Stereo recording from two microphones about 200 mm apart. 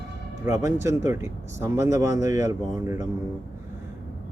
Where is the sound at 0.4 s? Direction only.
15° right (ahead or behind).